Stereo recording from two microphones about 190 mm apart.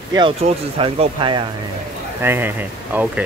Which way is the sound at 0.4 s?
40° right (ahead or behind).